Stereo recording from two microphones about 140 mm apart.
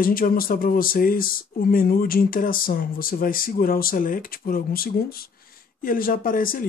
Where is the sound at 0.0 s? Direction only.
90° left.